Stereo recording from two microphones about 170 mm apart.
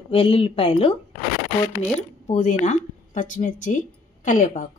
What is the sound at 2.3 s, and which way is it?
A woman's voice, 45° left (ahead or behind).